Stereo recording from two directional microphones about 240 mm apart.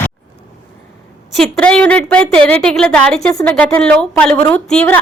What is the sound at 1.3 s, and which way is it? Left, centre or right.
A woman's voice, centre.